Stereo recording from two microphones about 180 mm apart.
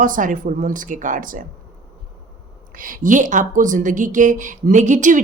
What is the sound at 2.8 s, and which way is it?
Speech, 50° right (ahead or behind).